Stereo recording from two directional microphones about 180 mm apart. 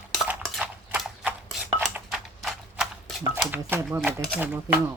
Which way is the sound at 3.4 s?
10° right (ahead or behind).